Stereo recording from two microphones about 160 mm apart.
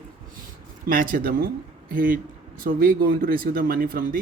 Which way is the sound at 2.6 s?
65° right (ahead or behind).